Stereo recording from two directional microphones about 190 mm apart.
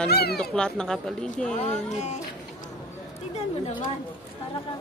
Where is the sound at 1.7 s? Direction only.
35° left (ahead or behind).